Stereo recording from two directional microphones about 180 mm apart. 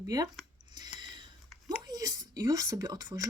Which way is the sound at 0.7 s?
25° right (ahead or behind).